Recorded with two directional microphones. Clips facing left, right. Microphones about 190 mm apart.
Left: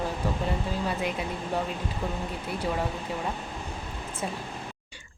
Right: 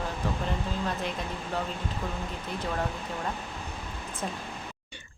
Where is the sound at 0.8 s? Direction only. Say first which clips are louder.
Left 3 dB; 10° left (ahead or behind).